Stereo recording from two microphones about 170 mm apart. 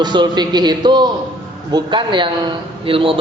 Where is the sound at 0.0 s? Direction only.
25° right (ahead or behind).